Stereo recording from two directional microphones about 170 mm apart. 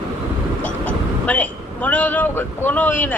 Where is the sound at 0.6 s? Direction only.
10° left (ahead or behind).